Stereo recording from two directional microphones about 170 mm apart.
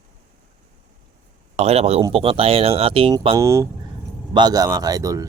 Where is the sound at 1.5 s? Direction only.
40° right (ahead or behind).